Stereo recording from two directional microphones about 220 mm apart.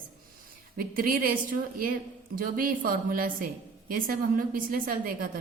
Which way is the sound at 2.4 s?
40° right (ahead or behind).